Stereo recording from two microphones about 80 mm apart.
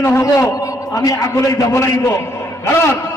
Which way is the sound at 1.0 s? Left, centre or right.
Left.